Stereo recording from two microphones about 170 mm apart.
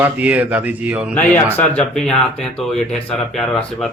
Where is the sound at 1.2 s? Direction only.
10° left (ahead or behind).